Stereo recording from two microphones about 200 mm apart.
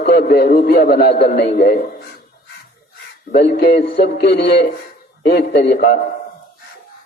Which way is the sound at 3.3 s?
55° left (ahead or behind).